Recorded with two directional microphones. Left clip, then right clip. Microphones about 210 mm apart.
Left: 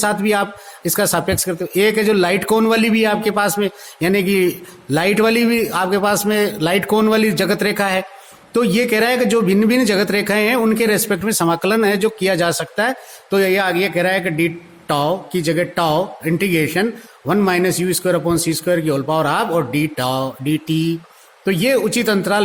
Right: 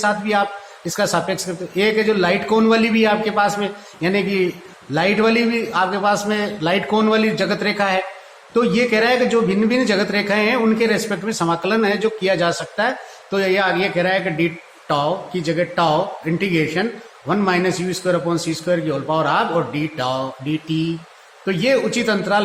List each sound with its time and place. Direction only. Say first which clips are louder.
0.0 s speech: left 1 dB; 50° left (ahead or behind)